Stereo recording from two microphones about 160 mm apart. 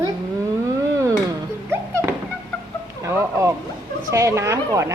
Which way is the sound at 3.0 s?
20° right (ahead or behind).